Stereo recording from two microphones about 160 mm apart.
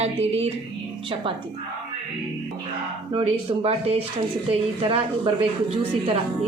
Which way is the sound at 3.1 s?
40° right (ahead or behind).